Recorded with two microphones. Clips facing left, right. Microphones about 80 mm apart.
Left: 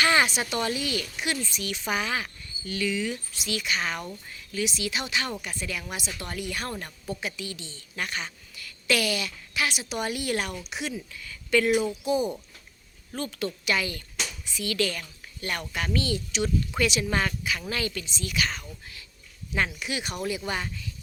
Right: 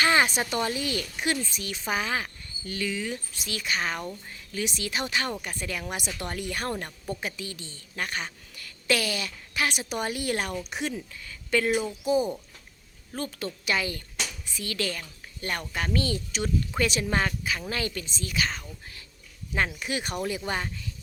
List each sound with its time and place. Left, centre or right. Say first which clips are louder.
0.0 s a sound: even; right
0.3 s a woman's voice: even; right
19.5 s speech: even; right